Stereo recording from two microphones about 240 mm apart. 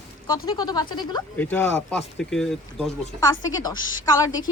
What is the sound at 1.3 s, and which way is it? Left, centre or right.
Speech, centre.